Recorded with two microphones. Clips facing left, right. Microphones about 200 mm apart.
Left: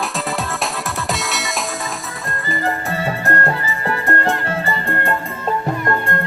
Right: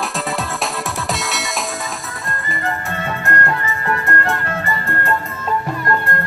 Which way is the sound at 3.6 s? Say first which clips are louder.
Even; 30° left (ahead or behind).